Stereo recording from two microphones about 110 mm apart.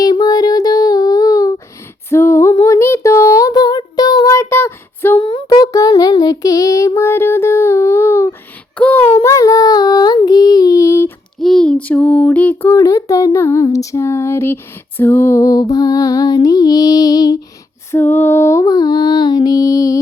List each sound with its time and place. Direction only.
0.0 s a sound: 40° left (ahead or behind)
2.0 s female singing: 25° left (ahead or behind)
2.6 s child singing: 25° left (ahead or behind)
4.4 s a sound: 25° left (ahead or behind)
5.1 s child singing: 45° left (ahead or behind); by 8.4 s 25° left (ahead or behind)
8.8 s a sound: 15° left (ahead or behind)
9.2 s child singing: 30° left (ahead or behind)
11.3 s child singing: 5° left (ahead or behind)
12.7 s a sound: 30° left (ahead or behind)
15.7 s lullaby: 35° left (ahead or behind)
17.9 s female singing: 20° left (ahead or behind)
18.6 s music: 35° left (ahead or behind)